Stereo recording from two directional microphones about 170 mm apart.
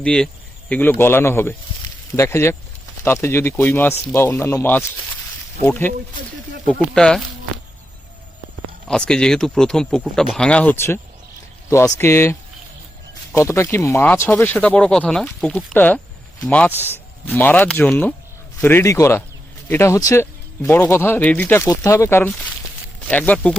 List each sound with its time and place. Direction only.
0.0 s speech: 5° left (ahead or behind)
8.9 s speech: 5° left (ahead or behind)